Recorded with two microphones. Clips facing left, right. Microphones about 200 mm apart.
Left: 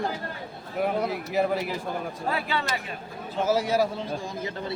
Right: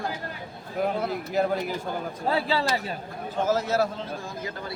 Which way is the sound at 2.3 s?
30° right (ahead or behind).